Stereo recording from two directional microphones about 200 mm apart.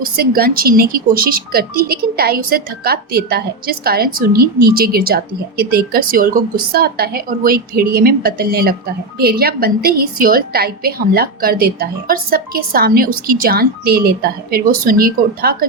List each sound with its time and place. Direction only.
0.0 s speech: 50° right (ahead or behind)